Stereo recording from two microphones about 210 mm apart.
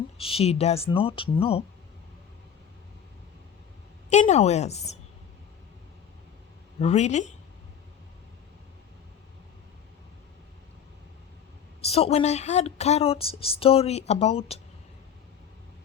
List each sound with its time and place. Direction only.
0.2 s speech: 25° left (ahead or behind)
4.1 s a woman's voice: 30° left (ahead or behind)
6.7 s a woman's voice: 30° left (ahead or behind)
11.9 s speech: 30° left (ahead or behind)